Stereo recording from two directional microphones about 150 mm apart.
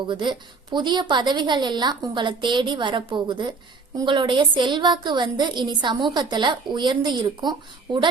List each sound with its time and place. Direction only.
0.1 s a woman's voice: 30° right (ahead or behind)